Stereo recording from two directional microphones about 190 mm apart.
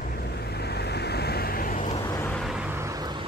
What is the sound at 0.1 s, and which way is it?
Vehicle, 55° left (ahead or behind).